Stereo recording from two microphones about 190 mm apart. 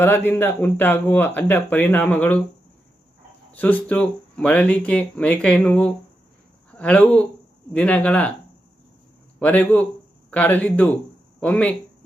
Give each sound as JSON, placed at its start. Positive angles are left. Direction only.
{"t": 0.0, "sound": "speech", "side_deg": 10}
{"t": 3.5, "sound": "speech", "side_deg": 10}
{"t": 9.4, "sound": "speech", "side_deg": 10}